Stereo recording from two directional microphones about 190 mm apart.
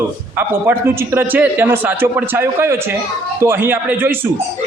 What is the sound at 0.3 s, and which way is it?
A man's voice, 10° right (ahead or behind).